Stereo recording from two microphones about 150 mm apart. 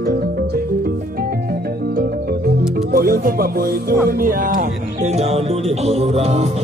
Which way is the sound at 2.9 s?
75° right (ahead or behind).